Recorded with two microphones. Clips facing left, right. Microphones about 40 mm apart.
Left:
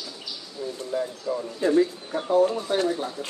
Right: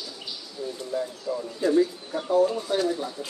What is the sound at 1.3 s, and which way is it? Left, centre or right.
Speech, left.